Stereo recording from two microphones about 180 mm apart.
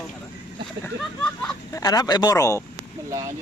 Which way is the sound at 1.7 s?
20° left (ahead or behind).